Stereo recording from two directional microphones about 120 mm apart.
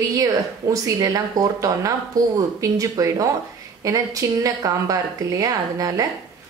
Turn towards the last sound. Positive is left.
turn(degrees=-30)  # may be behind; listen again after turning